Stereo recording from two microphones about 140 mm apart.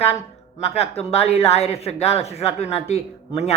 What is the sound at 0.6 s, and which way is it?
A woman's voice, 45° left (ahead or behind).